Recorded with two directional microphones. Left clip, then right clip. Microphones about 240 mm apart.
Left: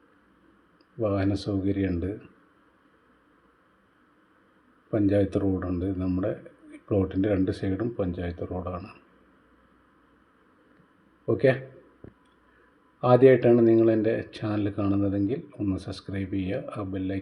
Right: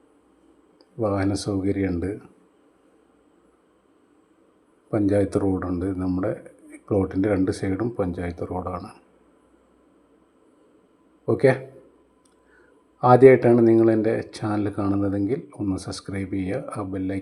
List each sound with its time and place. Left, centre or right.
0.9 s speech: right
4.9 s speech: right
11.3 s speech: right
13.0 s speech: right